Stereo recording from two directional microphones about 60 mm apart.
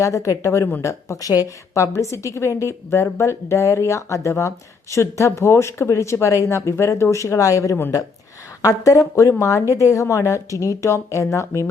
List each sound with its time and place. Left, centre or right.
0.0 s a woman's voice: left